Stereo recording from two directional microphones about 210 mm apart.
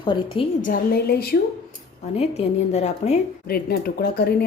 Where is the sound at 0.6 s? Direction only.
45° left (ahead or behind).